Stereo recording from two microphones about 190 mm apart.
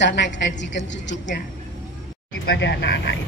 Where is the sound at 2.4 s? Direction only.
65° left (ahead or behind).